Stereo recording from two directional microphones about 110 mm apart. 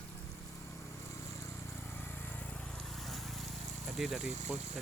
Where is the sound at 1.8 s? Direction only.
20° left (ahead or behind).